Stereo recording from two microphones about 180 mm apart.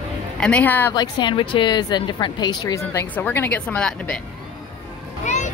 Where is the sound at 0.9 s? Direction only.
25° left (ahead or behind); by 4.1 s 5° left (ahead or behind).